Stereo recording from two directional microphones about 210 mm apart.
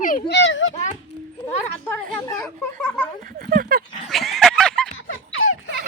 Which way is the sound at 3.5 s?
45° right (ahead or behind).